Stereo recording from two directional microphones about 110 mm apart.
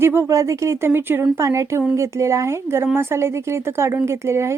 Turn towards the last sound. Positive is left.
turn(degrees=-25)  # may be behind; listen again after turning